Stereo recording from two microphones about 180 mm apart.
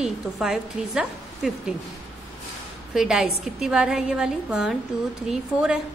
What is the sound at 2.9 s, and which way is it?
A woman's voice, 5° right (ahead or behind).